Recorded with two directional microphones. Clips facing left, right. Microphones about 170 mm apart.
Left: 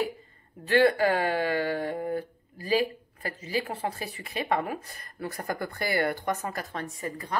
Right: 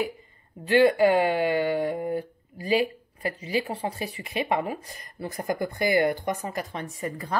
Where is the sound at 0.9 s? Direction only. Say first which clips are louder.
Right 5 dB; 15° right (ahead or behind).